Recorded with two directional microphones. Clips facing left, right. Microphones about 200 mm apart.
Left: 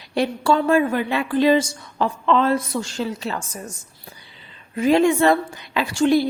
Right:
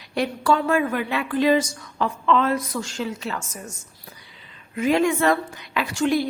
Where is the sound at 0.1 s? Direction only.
30° left (ahead or behind).